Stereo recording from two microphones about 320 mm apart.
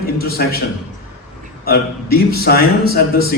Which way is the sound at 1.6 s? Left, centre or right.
Left.